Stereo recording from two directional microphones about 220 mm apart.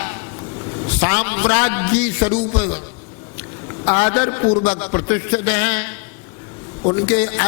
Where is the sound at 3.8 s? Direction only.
20° left (ahead or behind).